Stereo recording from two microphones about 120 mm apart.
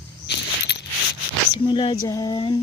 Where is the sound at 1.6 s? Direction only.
40° left (ahead or behind).